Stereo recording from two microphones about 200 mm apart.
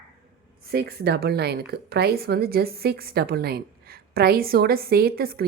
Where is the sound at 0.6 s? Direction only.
50° right (ahead or behind).